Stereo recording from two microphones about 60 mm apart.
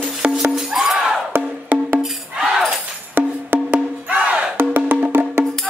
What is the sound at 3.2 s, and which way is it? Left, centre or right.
Music, right.